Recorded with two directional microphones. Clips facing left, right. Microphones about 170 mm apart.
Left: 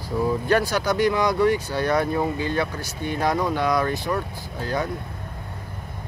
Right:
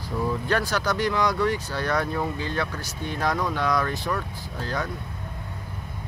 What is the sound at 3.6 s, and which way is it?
Speech, 15° left (ahead or behind).